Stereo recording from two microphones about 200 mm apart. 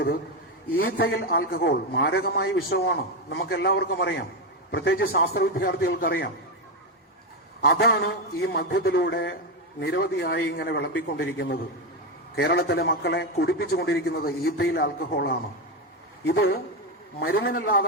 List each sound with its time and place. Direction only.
0.9 s a man's voice: 50° left (ahead or behind)
7.6 s a man's voice: 50° left (ahead or behind)
17.2 s a man's voice: 50° left (ahead or behind)